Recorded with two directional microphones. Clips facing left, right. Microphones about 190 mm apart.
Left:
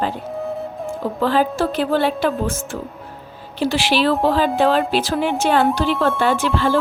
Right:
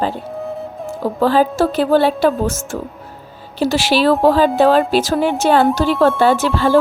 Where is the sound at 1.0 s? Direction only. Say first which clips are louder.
Right 4 dB; 35° right (ahead or behind).